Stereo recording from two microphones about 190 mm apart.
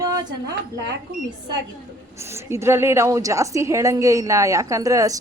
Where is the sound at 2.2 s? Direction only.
15° right (ahead or behind).